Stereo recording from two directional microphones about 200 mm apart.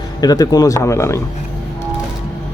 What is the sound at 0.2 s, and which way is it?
Speech, 20° left (ahead or behind).